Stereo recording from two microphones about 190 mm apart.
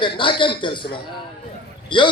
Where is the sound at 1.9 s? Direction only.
25° left (ahead or behind).